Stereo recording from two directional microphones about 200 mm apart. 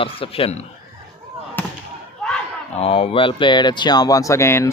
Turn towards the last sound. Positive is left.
turn(degrees=15)  # may be behind; listen again after turning